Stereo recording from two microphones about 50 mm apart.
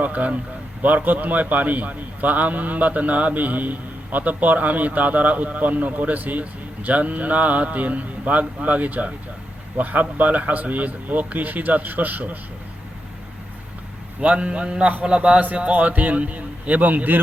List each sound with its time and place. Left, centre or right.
0.0 s a man's voice: right
14.2 s a man's voice: right